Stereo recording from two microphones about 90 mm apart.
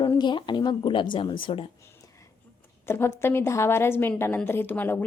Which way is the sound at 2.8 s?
25° left (ahead or behind).